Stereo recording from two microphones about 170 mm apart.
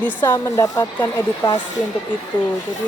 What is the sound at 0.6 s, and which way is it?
Speech, 20° left (ahead or behind).